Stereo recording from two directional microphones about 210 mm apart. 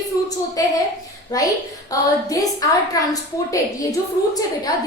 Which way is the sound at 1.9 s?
15° left (ahead or behind).